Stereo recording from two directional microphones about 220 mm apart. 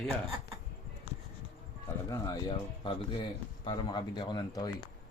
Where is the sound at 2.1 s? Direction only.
15° left (ahead or behind).